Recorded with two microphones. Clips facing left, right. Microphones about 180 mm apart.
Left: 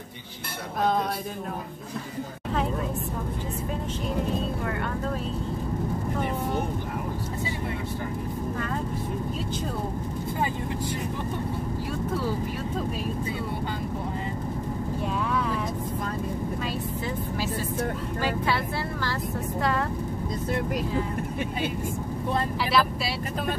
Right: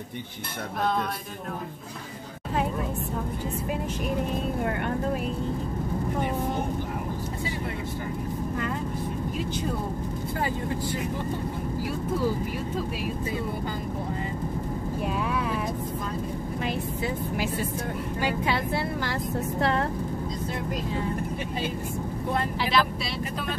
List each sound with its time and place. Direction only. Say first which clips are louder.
18.2 s vehicle: even; 15° right (ahead or behind)
19.6 s vehicle: right 1 dB; 25° right (ahead or behind)
22.7 s vehicle: left 2 dB; 5° left (ahead or behind)